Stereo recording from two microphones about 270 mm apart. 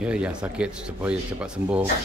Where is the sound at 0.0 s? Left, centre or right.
Centre.